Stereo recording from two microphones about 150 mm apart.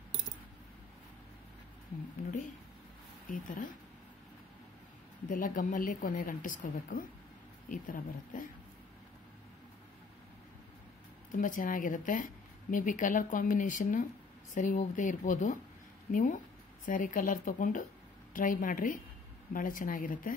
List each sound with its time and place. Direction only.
3.3 s speech: 65° left (ahead or behind)
5.3 s speech: 65° left (ahead or behind)
11.3 s a woman's voice: 65° left (ahead or behind)